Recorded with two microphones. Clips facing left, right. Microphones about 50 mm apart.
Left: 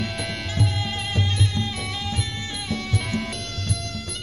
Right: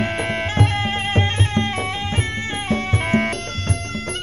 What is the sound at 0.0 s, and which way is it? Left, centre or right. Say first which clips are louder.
Music: right 7 dB; right.